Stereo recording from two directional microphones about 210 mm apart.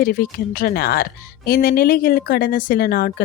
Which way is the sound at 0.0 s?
45° left (ahead or behind).